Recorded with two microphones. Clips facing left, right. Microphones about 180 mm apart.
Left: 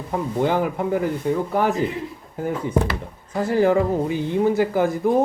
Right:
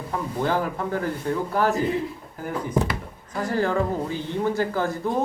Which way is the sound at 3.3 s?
20° left (ahead or behind).